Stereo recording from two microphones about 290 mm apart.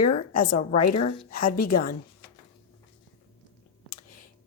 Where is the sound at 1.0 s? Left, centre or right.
Left.